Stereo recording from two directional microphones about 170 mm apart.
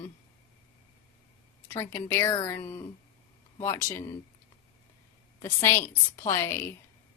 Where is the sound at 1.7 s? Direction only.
15° left (ahead or behind).